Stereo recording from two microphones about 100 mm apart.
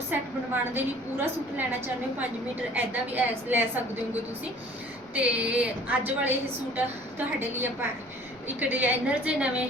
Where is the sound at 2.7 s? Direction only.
20° right (ahead or behind).